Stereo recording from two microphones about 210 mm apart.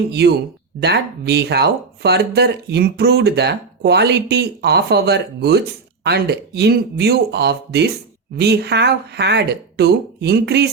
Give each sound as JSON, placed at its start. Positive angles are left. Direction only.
{"t": 0.1, "sound": "speech", "side_deg": -50}